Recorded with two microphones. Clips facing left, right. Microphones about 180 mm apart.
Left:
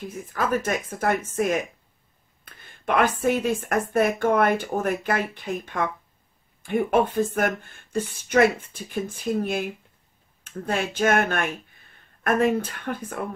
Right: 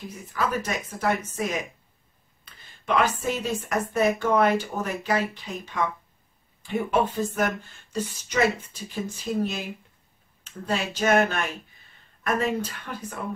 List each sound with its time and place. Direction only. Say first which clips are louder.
0.1 s a woman's voice: left 2 dB; 50° left (ahead or behind)